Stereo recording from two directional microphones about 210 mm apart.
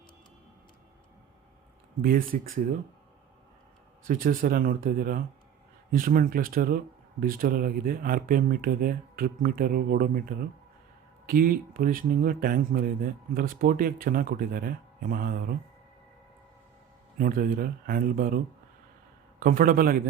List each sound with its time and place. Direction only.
2.0 s speech: 40° right (ahead or behind)
4.0 s speech: 40° right (ahead or behind)
17.2 s speech: 40° right (ahead or behind)
19.4 s speech: 40° right (ahead or behind)